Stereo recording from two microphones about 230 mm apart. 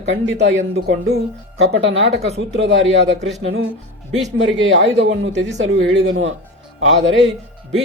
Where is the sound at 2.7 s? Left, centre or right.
Right.